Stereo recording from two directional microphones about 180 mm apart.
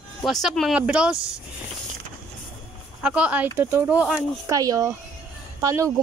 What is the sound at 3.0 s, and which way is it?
Speech, 5° right (ahead or behind).